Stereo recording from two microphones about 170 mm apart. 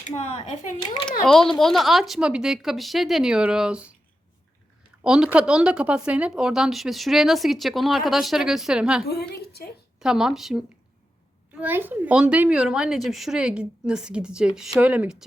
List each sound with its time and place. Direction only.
0.2 s speech: 40° left (ahead or behind)
1.2 s speech: centre (ahead or behind)
5.0 s speech: 5° right (ahead or behind)
9.0 s a woman's voice: 70° left (ahead or behind)
10.0 s a woman's voice: 5° right (ahead or behind)